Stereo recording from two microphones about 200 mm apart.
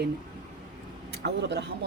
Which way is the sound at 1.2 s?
60° right (ahead or behind).